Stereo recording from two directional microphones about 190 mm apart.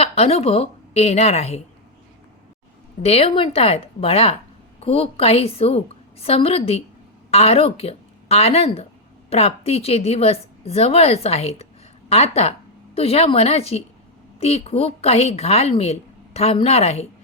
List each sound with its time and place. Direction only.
0.0 s a woman's voice: 35° left (ahead or behind)
3.0 s a woman's voice: 30° left (ahead or behind)